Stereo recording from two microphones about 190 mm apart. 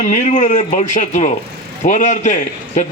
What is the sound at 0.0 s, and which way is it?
A man's voice, 40° left (ahead or behind).